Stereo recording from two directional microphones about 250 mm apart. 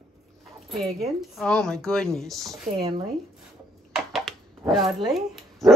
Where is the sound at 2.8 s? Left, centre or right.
Centre.